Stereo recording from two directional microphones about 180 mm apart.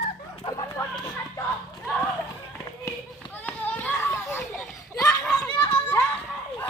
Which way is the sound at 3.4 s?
10° left (ahead or behind).